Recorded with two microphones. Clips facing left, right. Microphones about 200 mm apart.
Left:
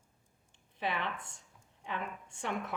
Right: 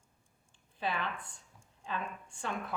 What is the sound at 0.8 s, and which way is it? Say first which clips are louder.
A woman's voice: even; 20° left (ahead or behind).